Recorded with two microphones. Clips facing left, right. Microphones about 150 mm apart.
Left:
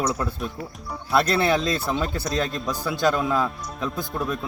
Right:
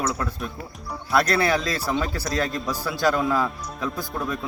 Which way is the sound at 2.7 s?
20° left (ahead or behind).